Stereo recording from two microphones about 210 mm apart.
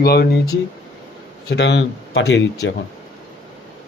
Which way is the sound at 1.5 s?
55° left (ahead or behind).